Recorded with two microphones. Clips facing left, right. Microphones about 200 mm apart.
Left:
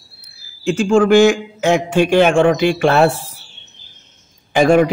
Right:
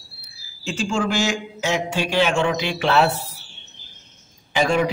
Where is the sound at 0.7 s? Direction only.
55° left (ahead or behind).